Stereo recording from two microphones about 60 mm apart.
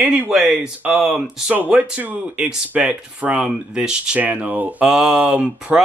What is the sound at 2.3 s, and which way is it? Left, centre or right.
Speech, centre.